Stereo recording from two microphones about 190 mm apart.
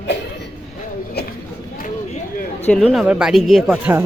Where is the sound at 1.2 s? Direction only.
60° left (ahead or behind).